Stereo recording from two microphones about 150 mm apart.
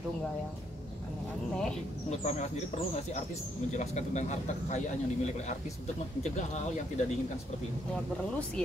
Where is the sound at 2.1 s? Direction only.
50° left (ahead or behind).